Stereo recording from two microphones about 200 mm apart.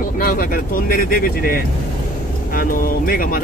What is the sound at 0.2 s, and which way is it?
Speech, 45° left (ahead or behind).